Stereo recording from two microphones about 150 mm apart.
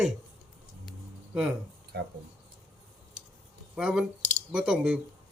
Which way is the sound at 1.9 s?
90° right.